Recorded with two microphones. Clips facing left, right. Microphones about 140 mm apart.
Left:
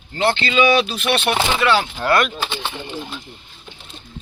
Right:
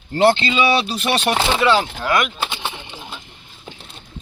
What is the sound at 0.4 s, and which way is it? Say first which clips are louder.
Speech: left 2 dB; 30° right (ahead or behind).